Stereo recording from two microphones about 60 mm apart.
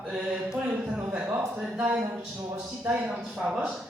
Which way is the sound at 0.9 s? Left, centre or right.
Right.